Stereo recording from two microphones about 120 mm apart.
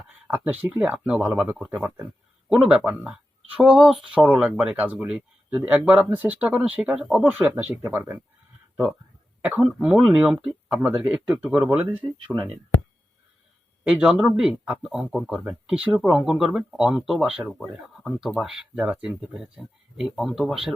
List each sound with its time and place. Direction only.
0.3 s speech: 10° right (ahead or behind)
2.5 s speech: 5° right (ahead or behind)
12.3 s speech: centre (ahead or behind)
13.8 s speech: 10° right (ahead or behind)